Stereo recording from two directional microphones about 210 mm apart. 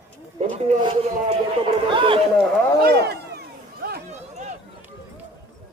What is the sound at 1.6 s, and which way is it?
Speech, 25° right (ahead or behind).